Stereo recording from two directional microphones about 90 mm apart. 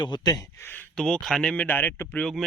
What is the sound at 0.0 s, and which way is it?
Speech, 50° left (ahead or behind).